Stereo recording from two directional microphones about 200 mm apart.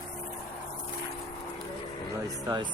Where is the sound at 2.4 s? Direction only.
20° right (ahead or behind).